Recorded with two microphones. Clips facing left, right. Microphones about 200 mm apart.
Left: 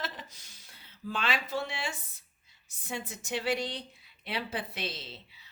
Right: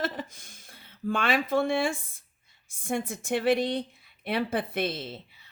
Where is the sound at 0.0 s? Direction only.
50° right (ahead or behind).